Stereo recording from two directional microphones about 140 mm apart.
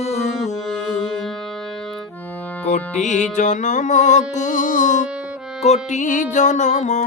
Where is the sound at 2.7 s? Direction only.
55° left (ahead or behind).